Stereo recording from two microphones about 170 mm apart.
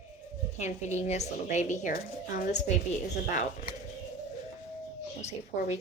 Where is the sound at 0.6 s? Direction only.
45° left (ahead or behind).